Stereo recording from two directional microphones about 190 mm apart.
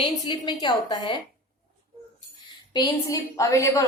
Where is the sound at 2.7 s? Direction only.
15° left (ahead or behind).